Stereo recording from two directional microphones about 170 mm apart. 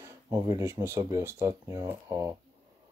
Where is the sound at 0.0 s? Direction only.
20° right (ahead or behind).